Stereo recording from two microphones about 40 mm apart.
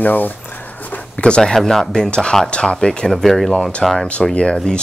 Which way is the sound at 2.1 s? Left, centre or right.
Left.